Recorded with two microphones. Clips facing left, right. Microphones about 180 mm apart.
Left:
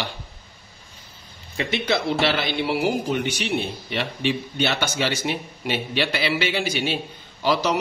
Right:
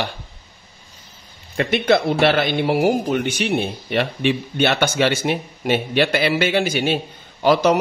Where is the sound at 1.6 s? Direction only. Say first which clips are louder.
Right 7 dB; 55° right (ahead or behind).